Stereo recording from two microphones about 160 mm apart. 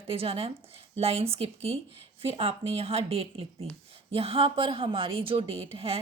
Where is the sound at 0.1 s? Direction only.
35° right (ahead or behind).